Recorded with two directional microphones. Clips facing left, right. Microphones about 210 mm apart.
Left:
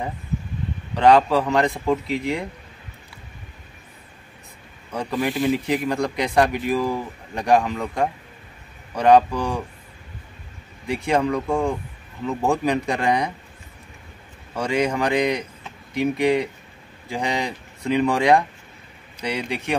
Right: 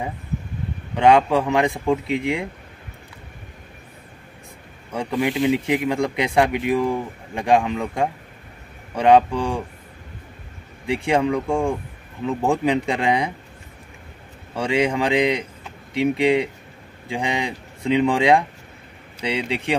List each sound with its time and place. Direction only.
0.9 s speech: 15° right (ahead or behind)
4.9 s speech: 10° right (ahead or behind)
11.1 s speech: 15° right (ahead or behind)
14.6 s speech: 25° right (ahead or behind)